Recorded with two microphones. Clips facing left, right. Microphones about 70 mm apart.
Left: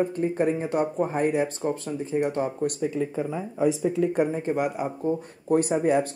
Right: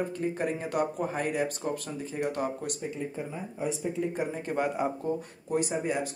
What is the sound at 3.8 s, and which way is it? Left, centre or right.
Speech, left.